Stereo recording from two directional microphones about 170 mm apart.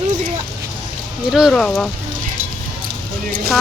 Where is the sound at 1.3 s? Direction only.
Centre (ahead or behind).